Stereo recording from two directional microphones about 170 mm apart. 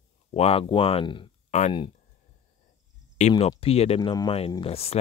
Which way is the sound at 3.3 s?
30° left (ahead or behind).